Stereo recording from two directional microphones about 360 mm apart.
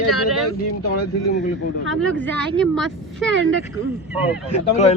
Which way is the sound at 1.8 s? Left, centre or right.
Right.